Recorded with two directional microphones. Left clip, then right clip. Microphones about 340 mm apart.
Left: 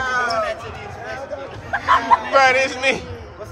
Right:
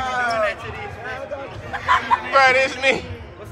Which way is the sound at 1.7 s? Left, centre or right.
Left.